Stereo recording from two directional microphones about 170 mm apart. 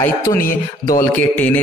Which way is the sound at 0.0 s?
15° left (ahead or behind).